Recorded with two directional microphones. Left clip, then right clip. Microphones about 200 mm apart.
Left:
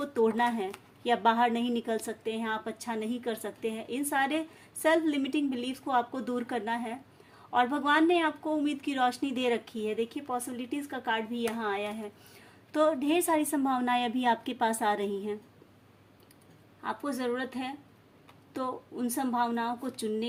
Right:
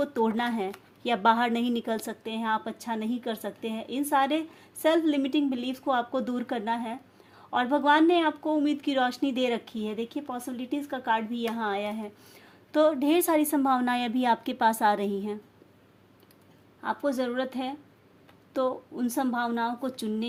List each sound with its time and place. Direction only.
0.0 s a woman's voice: 35° right (ahead or behind)
16.8 s a woman's voice: 30° right (ahead or behind)